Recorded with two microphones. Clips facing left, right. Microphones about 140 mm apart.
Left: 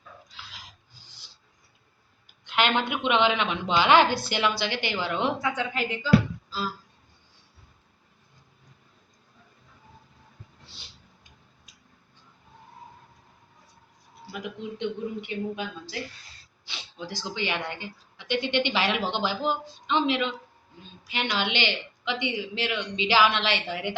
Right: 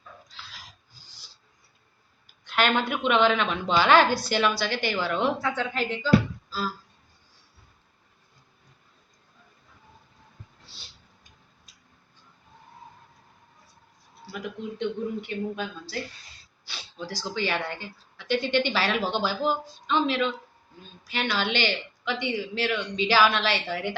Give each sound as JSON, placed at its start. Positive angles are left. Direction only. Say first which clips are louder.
{"t": 2.2, "sound": "a man's voice", "louder": "right 1 dB", "side_deg": 15}
{"t": 14.8, "sound": "a man's voice", "louder": "right 2 dB", "side_deg": 15}